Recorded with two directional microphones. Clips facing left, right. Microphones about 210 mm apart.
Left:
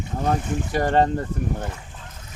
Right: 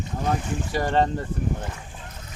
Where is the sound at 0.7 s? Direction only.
50° left (ahead or behind).